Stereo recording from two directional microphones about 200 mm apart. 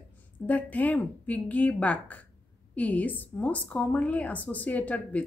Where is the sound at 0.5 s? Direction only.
10° left (ahead or behind).